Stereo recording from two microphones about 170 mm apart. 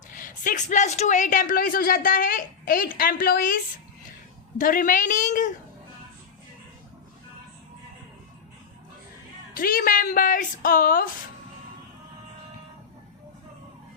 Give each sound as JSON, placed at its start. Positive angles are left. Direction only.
{"t": 0.1, "sound": "speech", "side_deg": 50}
{"t": 9.6, "sound": "a woman's voice", "side_deg": 55}